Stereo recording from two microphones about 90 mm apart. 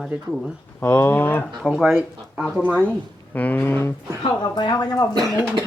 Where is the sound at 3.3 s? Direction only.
20° left (ahead or behind).